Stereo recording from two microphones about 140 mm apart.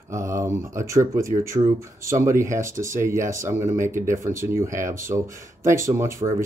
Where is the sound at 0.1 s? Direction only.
20° right (ahead or behind).